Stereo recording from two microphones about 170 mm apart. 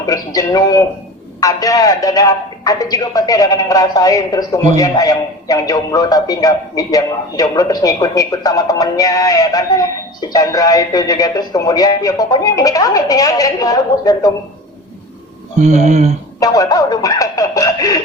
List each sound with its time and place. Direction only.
0.0 s a man's voice: 20° left (ahead or behind)
15.6 s speech: 45° right (ahead or behind)
16.4 s a man's voice: 20° left (ahead or behind)